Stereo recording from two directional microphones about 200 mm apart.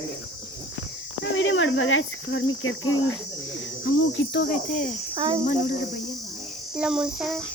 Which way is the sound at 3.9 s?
65° left (ahead or behind).